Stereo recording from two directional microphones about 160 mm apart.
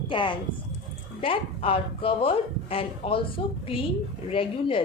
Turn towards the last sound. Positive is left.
turn(degrees=35)  # may be behind; listen again after turning